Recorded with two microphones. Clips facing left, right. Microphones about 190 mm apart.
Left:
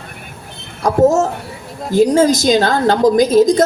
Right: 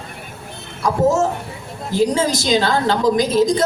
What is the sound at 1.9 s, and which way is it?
A woman's voice, 45° left (ahead or behind).